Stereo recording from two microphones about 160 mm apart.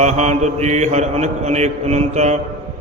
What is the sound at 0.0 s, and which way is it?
Mantra, 45° right (ahead or behind).